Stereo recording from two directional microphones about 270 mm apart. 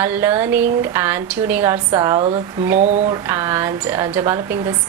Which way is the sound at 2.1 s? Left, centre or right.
Right.